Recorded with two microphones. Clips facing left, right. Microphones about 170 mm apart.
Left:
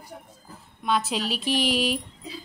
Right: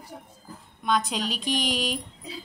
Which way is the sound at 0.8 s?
5° left (ahead or behind).